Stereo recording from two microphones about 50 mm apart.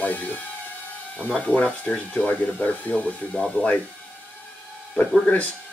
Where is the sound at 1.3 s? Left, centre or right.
Centre.